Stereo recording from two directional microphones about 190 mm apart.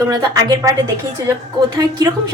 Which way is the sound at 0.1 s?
20° right (ahead or behind).